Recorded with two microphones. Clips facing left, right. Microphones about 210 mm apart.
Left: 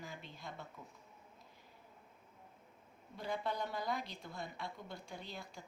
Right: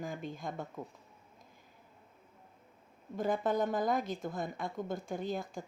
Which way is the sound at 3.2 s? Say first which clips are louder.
Right 9 dB; 50° right (ahead or behind).